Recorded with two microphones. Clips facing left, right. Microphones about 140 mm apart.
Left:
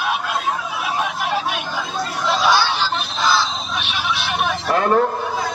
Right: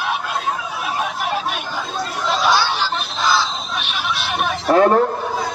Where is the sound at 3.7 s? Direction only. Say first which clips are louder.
Left 1 dB; centre (ahead or behind).